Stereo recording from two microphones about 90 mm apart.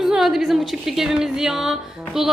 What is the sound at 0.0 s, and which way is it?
A woman's voice, 5° right (ahead or behind).